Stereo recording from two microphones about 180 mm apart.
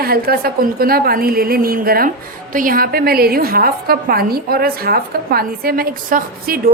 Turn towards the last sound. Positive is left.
turn(degrees=-55)  # may be behind; listen again after turning